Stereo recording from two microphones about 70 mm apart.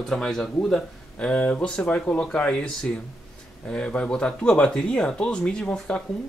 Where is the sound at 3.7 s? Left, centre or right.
Centre.